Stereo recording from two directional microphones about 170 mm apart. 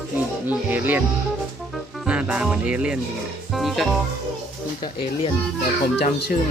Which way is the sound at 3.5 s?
Centre (ahead or behind).